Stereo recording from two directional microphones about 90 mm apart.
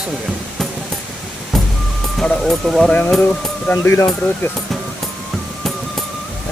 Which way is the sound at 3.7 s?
30° left (ahead or behind).